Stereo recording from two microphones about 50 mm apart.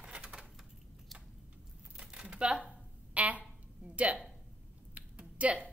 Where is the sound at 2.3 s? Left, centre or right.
Right.